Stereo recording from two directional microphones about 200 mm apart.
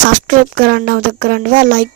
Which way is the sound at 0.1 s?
45° right (ahead or behind).